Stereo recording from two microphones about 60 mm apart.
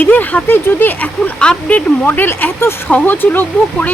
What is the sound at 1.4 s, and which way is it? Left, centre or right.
Speech, centre.